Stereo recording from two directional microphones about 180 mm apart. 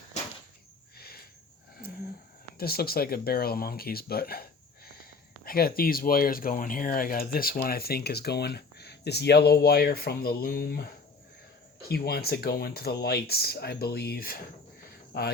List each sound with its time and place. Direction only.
0.9 s a sound: 60° left (ahead or behind)
2.6 s speech: 60° left (ahead or behind)
5.5 s speech: 55° left (ahead or behind)